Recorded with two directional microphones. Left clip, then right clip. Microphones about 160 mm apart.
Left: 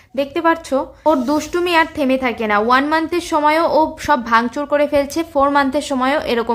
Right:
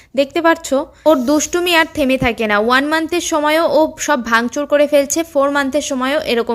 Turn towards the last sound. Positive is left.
turn(degrees=-20)  # may be behind; listen again after turning